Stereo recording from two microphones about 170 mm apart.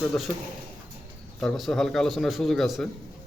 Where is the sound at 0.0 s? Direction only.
5° left (ahead or behind).